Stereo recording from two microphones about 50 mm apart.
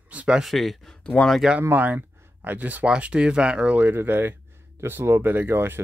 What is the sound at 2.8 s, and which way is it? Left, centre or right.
Speech, right.